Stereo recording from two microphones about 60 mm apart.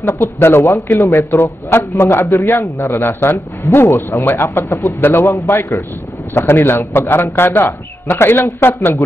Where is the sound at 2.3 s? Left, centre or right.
Left.